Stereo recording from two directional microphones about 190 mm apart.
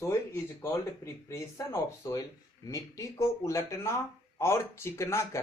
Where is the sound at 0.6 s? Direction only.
15° left (ahead or behind).